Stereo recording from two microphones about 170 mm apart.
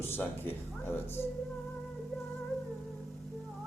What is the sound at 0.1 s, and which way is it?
Speech, 10° left (ahead or behind).